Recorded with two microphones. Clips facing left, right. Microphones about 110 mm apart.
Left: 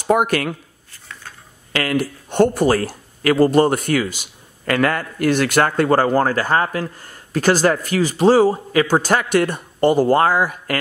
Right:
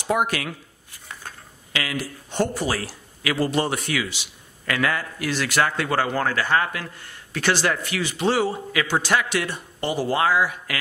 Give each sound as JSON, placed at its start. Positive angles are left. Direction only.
{"t": 0.0, "sound": "speech", "side_deg": 50}
{"t": 1.7, "sound": "speech", "side_deg": 55}